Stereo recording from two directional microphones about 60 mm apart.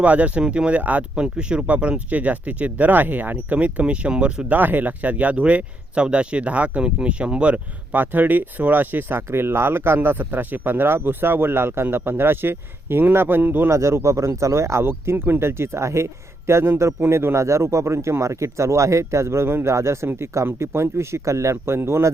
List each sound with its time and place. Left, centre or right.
0.0 s speech: right
1.2 s speech: centre
4.5 s speech: right
13.7 s a man's voice: right